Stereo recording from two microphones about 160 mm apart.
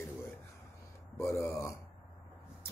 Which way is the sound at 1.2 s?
20° left (ahead or behind).